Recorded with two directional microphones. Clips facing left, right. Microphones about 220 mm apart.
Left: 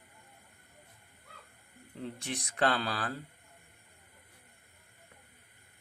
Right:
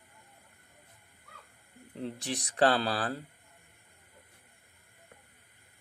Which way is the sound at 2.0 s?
35° right (ahead or behind).